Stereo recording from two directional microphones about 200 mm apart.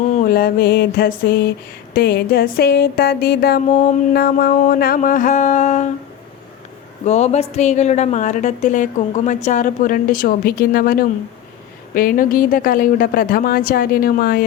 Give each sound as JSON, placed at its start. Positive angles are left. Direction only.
{"t": 0.2, "sound": "mantra", "side_deg": 50}
{"t": 7.0, "sound": "a woman's voice", "side_deg": 35}
{"t": 11.9, "sound": "mantra", "side_deg": 45}